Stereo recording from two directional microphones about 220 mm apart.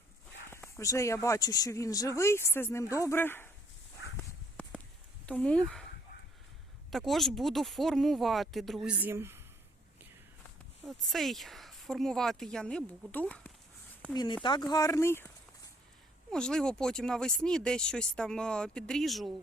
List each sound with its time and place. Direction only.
0.5 s speech: 15° left (ahead or behind)
4.2 s a sound: 5° left (ahead or behind)
5.2 s speech: 5° left (ahead or behind)
6.9 s speech: centre (ahead or behind)
10.8 s speech: centre (ahead or behind)
14.1 s speech: 20° left (ahead or behind)
16.3 s speech: 5° left (ahead or behind)